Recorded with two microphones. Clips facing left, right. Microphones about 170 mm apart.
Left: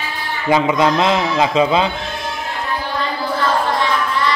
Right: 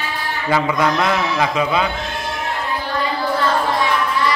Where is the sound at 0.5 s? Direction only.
20° left (ahead or behind).